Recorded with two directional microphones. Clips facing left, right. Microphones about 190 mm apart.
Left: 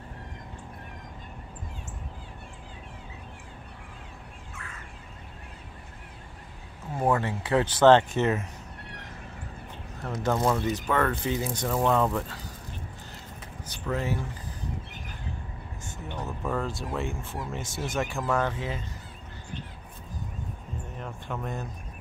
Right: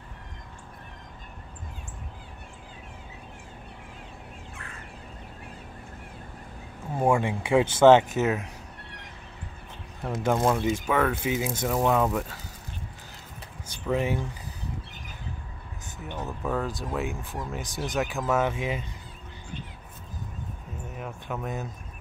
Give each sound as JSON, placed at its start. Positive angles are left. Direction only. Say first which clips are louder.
{"t": 7.0, "sound": "speech", "louder": "right 2 dB", "side_deg": -10}
{"t": 10.2, "sound": "speech", "louder": "right 2 dB", "side_deg": -10}
{"t": 13.8, "sound": "speech", "louder": "right 3 dB", "side_deg": -15}
{"t": 16.2, "sound": "speech", "louder": "right 1 dB", "side_deg": 0}
{"t": 20.9, "sound": "a sound", "louder": "right 2 dB", "side_deg": -5}